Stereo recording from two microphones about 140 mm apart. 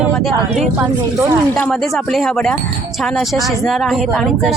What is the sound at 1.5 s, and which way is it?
Speech, 5° left (ahead or behind).